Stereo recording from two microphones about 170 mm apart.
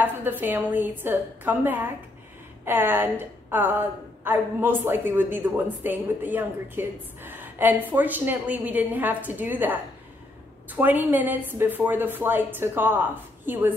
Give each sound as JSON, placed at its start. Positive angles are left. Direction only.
{"t": 0.0, "sound": "a woman's voice", "side_deg": -10}